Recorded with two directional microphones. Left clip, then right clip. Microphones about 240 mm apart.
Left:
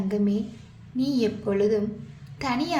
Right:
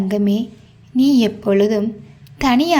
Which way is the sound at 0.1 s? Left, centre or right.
Right.